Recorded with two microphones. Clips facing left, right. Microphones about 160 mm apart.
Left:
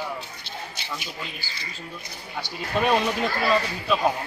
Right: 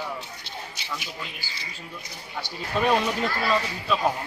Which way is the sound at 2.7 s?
15° left (ahead or behind).